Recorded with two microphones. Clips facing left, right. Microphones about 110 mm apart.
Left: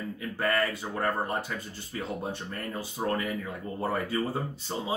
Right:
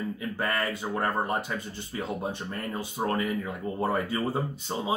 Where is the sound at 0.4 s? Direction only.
20° right (ahead or behind).